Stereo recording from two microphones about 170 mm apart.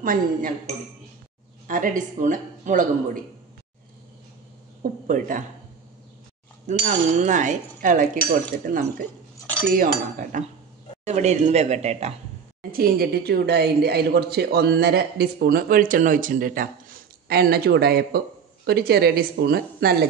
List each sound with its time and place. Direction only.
0.0 s speech: 55° right (ahead or behind)
1.7 s speech: 50° right (ahead or behind)
5.0 s speech: 50° right (ahead or behind)
6.7 s speech: 45° right (ahead or behind)
11.1 s speech: 45° right (ahead or behind)
12.7 s a woman's voice: 60° right (ahead or behind)